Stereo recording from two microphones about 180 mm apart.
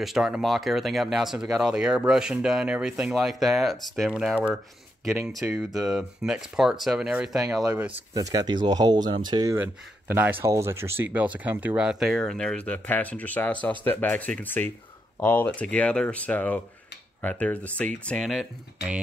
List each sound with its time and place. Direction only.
0.0 s speech: centre (ahead or behind); by 9.6 s 20° right (ahead or behind)
9.6 s speech: 10° right (ahead or behind)